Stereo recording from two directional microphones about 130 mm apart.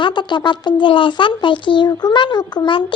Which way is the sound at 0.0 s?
35° left (ahead or behind).